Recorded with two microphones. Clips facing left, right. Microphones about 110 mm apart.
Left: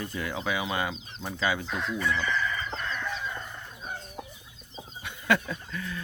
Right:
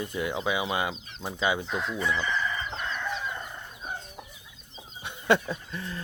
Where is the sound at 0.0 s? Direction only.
20° right (ahead or behind).